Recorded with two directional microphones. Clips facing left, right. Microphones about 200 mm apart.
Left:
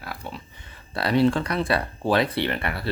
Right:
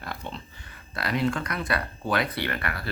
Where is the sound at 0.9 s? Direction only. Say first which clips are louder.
Left 6 dB; 30° left (ahead or behind).